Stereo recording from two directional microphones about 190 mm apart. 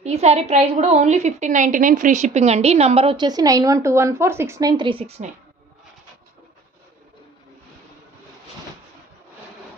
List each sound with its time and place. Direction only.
0.0 s a woman's voice: 35° right (ahead or behind)